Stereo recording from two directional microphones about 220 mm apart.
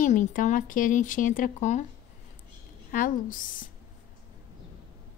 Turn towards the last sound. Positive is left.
turn(degrees=40)  # may be behind; listen again after turning